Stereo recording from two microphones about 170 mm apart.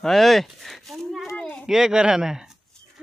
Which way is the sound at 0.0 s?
Centre (ahead or behind).